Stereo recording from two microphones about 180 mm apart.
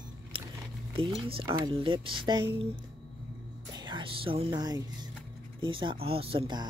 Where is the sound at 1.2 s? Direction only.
25° right (ahead or behind).